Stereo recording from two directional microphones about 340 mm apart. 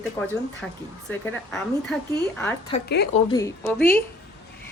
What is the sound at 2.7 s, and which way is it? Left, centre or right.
Speech, left.